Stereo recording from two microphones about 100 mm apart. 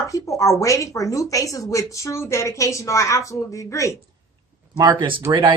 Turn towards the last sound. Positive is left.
turn(degrees=-55)  # may be behind; listen again after turning